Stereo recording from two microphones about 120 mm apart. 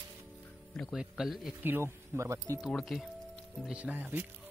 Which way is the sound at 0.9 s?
5° right (ahead or behind).